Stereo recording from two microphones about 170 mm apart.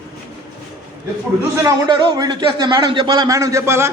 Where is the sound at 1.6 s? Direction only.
25° right (ahead or behind).